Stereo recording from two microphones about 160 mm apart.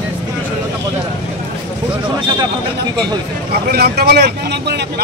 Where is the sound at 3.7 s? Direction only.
85° right.